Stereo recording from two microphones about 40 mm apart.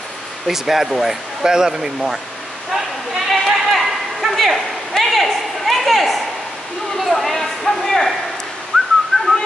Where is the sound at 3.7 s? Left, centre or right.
Centre.